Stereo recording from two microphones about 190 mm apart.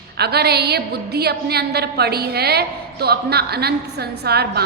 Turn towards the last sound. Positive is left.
turn(degrees=-55)  # may be behind; listen again after turning